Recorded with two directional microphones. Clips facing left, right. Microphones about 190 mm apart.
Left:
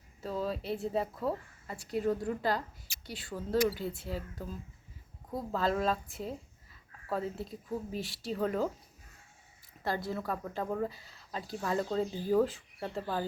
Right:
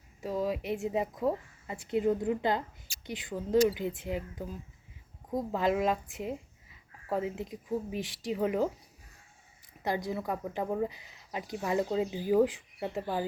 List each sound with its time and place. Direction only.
0.2 s speech: 15° right (ahead or behind)
9.8 s speech: 15° right (ahead or behind)